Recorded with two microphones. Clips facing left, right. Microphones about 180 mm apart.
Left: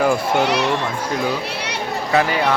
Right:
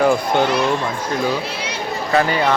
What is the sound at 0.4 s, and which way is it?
Speech, 70° left (ahead or behind).